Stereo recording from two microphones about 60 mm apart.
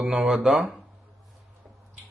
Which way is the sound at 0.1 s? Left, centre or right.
Centre.